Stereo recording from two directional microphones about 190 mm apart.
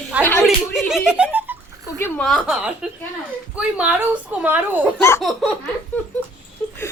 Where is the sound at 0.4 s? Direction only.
Centre (ahead or behind).